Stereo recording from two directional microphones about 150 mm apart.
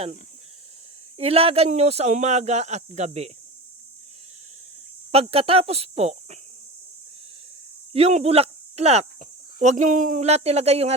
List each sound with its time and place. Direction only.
1.2 s speech: 40° right (ahead or behind)
5.1 s speech: 40° right (ahead or behind)
7.9 s speech: 40° right (ahead or behind)